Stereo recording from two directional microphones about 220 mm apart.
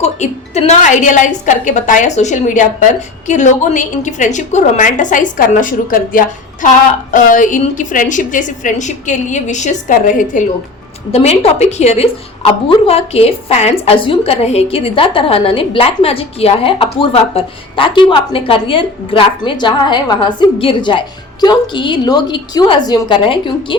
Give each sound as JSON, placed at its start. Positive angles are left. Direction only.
{"t": 0.0, "sound": "a woman's voice", "side_deg": 30}